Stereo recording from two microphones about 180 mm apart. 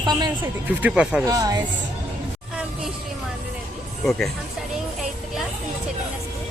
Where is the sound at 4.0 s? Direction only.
Centre (ahead or behind).